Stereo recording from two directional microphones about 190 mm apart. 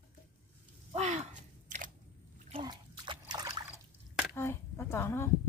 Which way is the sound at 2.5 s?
25° right (ahead or behind).